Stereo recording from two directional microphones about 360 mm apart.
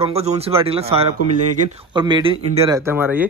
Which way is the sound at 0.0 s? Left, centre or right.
Centre.